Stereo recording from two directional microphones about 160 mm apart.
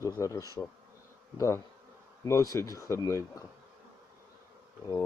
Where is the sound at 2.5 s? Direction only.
20° left (ahead or behind).